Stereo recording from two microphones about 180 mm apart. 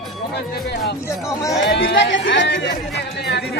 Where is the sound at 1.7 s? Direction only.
75° left (ahead or behind).